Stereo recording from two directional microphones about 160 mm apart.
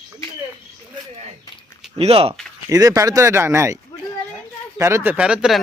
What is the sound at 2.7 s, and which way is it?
Speech, 20° right (ahead or behind).